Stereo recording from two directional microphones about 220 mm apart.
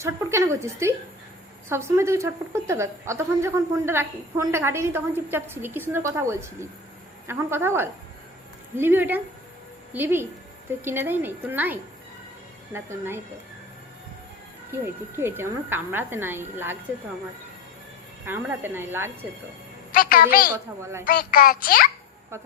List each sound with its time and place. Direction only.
0.0 s a woman's voice: 10° right (ahead or behind)
14.7 s a woman's voice: 10° right (ahead or behind)
18.3 s a woman's voice: 10° right (ahead or behind)
19.9 s a woman's voice: 40° left (ahead or behind)